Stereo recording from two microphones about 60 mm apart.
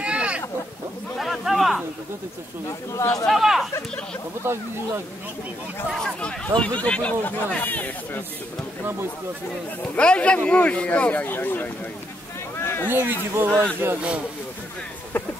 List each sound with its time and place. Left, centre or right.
0.0 s a sound: centre
1.1 s a sound: centre
2.9 s speech: left
3.3 s speech: centre
4.4 s speech: right
5.9 s speech: centre
6.2 s a man's voice: centre
7.2 s speech: left
9.9 s a man's voice: centre
11.2 s speech: left
12.5 s a sound: left
12.8 s speech: right
15.1 s a sound: left